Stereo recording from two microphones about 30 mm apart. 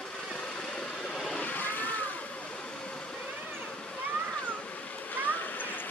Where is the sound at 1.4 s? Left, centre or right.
Left.